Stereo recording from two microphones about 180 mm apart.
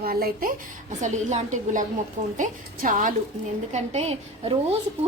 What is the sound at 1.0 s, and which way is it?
A woman's voice, 40° right (ahead or behind).